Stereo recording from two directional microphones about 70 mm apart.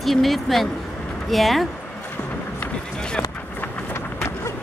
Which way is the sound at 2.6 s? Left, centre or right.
Centre.